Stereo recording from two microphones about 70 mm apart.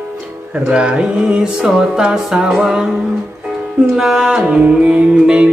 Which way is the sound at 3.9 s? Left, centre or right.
Centre.